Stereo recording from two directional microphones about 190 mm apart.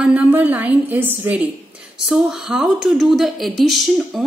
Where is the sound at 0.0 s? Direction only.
5° right (ahead or behind).